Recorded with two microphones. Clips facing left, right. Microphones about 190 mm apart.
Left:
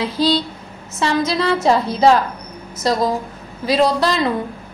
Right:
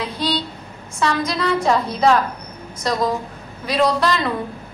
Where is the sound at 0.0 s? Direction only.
30° left (ahead or behind).